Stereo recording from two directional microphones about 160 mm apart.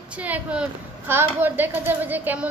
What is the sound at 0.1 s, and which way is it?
A woman's voice, 10° right (ahead or behind).